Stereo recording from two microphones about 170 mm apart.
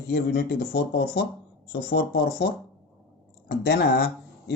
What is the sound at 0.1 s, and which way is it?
Speech, 65° left (ahead or behind).